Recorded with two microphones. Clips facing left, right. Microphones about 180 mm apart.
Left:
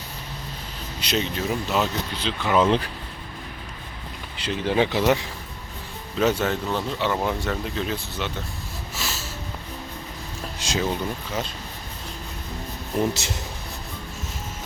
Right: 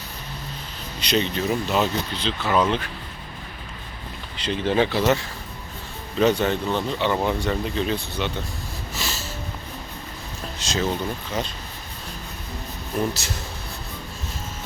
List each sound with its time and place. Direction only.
0.9 s speech: 5° left (ahead or behind)
2.6 s speech: 35° left (ahead or behind)
4.4 s speech: 10° left (ahead or behind)
6.1 s speech: 5° left (ahead or behind)
9.0 s snort: 5° left (ahead or behind)
10.6 s boat: 10° left (ahead or behind)
11.3 s speech: 5° left (ahead or behind)
13.1 s speech: 20° left (ahead or behind)